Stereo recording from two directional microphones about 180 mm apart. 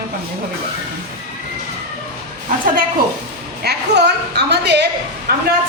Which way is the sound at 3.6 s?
65° right (ahead or behind).